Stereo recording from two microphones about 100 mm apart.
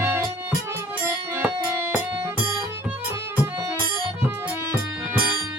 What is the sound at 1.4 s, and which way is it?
Music, 20° right (ahead or behind).